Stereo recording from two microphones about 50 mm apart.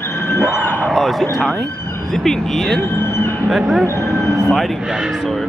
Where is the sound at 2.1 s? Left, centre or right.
Centre.